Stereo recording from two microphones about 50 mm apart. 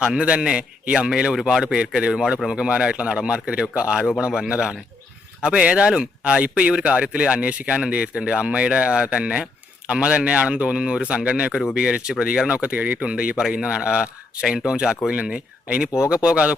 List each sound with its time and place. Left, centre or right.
0.0 s speech: centre
1.6 s speech: right
5.4 s speech: centre
11.5 s speech: centre; by 13.0 s right
13.0 s speech: right